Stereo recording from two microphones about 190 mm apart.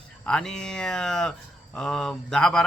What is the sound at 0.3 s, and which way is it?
Speech, 5° left (ahead or behind).